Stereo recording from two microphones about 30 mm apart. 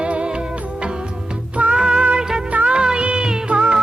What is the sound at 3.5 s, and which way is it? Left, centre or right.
Music, right.